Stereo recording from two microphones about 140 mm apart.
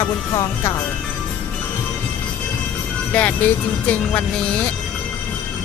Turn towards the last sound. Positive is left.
turn(degrees=10)  # may be behind; listen again after turning